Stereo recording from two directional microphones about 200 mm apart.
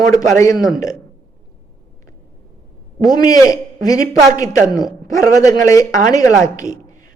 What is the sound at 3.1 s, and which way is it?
A man's voice, 20° left (ahead or behind).